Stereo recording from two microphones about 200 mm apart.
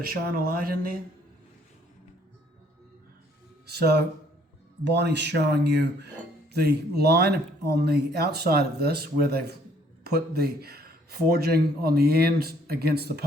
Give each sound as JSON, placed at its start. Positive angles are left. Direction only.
{"t": 0.0, "sound": "speech", "side_deg": -45}
{"t": 3.8, "sound": "speech", "side_deg": -55}